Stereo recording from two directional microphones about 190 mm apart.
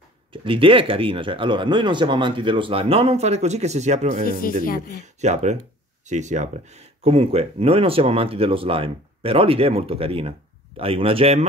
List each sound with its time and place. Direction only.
0.3 s speech: 25° right (ahead or behind)
4.3 s speech: 50° left (ahead or behind)
5.0 s speech: 35° right (ahead or behind)